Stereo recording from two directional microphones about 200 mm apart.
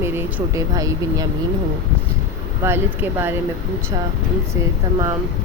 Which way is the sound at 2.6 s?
10° right (ahead or behind).